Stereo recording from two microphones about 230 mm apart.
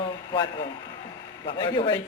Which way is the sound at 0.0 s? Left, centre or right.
Centre.